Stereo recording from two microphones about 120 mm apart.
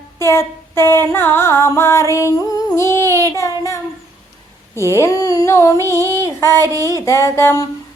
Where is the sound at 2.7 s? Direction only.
25° left (ahead or behind).